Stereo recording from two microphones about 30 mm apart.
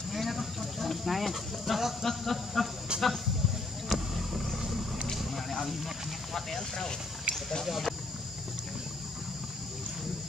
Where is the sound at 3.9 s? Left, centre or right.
Centre.